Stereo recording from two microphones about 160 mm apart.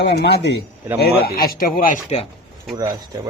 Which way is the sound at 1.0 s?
75° left (ahead or behind).